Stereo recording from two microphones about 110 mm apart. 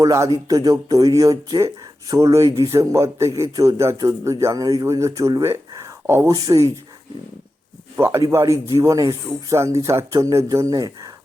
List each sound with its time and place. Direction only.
0.0 s speech: 30° right (ahead or behind)
7.9 s speech: 25° right (ahead or behind)